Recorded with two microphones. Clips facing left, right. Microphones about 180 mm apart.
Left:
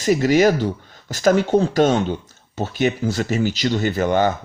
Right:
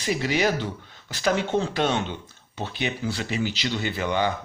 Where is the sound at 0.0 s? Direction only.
45° left (ahead or behind).